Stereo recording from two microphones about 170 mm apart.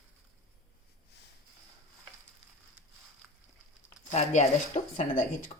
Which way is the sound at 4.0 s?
40° left (ahead or behind).